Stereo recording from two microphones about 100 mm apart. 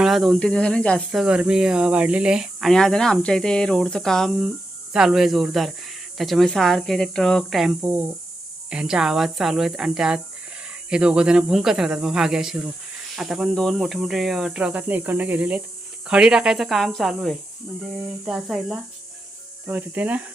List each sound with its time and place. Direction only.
0.0 s snake: centre (ahead or behind)
0.3 s speech: 10° left (ahead or behind)
1.1 s speech: 5° right (ahead or behind)
7.8 s cricket: 15° right (ahead or behind)
8.7 s speech: 10° right (ahead or behind)
10.8 s cricket: 10° right (ahead or behind)
13.1 s speech: 5° right (ahead or behind)
13.5 s cricket: 5° left (ahead or behind); by 15.6 s 15° right (ahead or behind)
16.0 s speech: 10° right (ahead or behind)
18.0 s cricket: 5° right (ahead or behind)
19.6 s cricket: 20° right (ahead or behind)